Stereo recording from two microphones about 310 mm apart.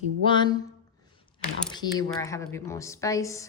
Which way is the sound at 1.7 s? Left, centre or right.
Centre.